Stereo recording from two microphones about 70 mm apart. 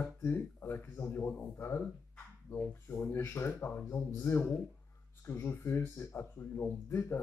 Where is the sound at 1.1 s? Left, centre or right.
Left.